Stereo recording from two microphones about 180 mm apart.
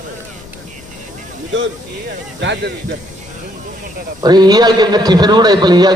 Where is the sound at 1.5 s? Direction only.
90° right.